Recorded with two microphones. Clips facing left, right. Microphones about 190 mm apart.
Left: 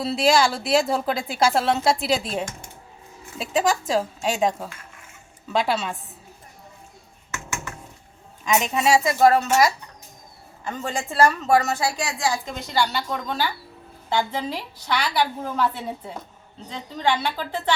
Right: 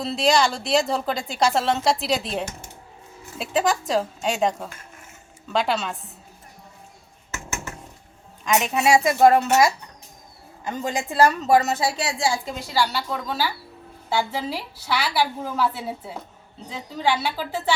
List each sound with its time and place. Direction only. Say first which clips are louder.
0.0 s speech: left 1 dB; centre (ahead or behind)
8.5 s a woman's voice: right 1 dB; 5° right (ahead or behind)
10.7 s a woman's voice: right 2 dB; 15° right (ahead or behind)
12.5 s a woman's voice: even; 5° right (ahead or behind)